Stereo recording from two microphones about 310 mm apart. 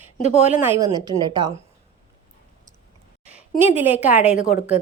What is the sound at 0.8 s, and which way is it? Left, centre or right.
Speech, centre.